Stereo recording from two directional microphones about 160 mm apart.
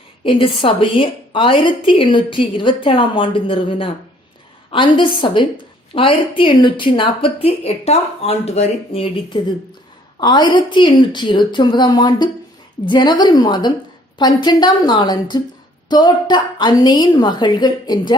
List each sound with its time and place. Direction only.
0.3 s a woman's voice: 35° left (ahead or behind)